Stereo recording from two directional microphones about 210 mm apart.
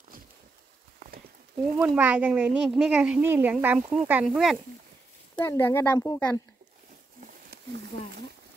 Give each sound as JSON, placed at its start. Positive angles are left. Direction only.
{"t": 1.6, "sound": "speech", "side_deg": -5}
{"t": 5.4, "sound": "speech", "side_deg": 10}
{"t": 7.5, "sound": "a sound", "side_deg": -50}